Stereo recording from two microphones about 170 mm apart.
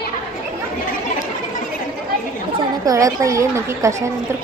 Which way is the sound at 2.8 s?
20° right (ahead or behind).